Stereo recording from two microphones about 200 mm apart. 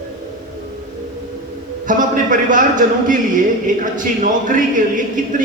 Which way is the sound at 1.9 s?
40° right (ahead or behind).